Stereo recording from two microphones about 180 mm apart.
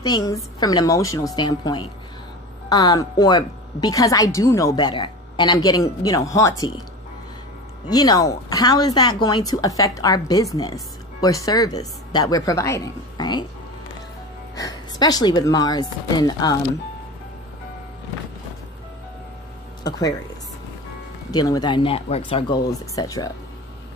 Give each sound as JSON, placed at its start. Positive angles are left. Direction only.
{"t": 0.0, "sound": "a woman's voice", "side_deg": 20}
{"t": 7.9, "sound": "a woman's voice", "side_deg": 20}
{"t": 14.5, "sound": "a woman's voice", "side_deg": 20}
{"t": 19.8, "sound": "a woman's voice", "side_deg": 20}
{"t": 21.3, "sound": "a woman's voice", "side_deg": 20}